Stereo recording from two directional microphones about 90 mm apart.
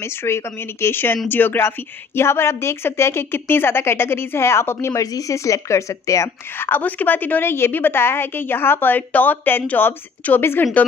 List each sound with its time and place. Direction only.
0.2 s speech: 30° left (ahead or behind)